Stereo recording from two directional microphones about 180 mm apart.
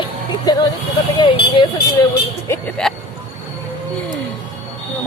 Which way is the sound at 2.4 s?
10° left (ahead or behind).